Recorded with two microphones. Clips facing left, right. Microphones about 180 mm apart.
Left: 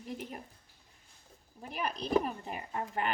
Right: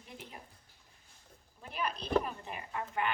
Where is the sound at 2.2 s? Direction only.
40° left (ahead or behind).